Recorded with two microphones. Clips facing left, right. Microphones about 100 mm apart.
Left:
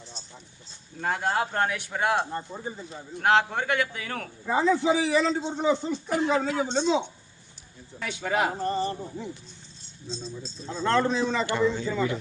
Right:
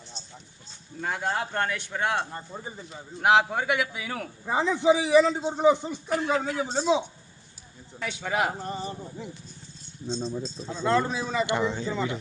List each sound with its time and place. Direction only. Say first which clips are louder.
1.0 s speech: left 3 dB; 5° left (ahead or behind)
3.2 s a man's voice: right 1 dB; 10° right (ahead or behind)
4.4 s a man's voice: even; 20° right (ahead or behind)
6.1 s speech: left 1 dB; 20° left (ahead or behind)
6.7 s a man's voice: right 3 dB; 10° right (ahead or behind)
8.0 s speech: left 1 dB; centre (ahead or behind)
10.1 s speech: right 6 dB; 35° right (ahead or behind)
10.4 s a man's voice: even; centre (ahead or behind); by 12.1 s 20° right (ahead or behind)